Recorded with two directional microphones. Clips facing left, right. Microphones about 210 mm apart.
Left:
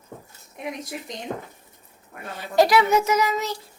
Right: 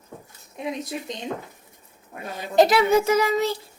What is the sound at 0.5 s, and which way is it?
Child singing, 25° right (ahead or behind).